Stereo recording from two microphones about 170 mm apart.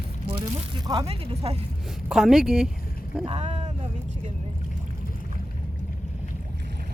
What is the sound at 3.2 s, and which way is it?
Speech, 35° right (ahead or behind).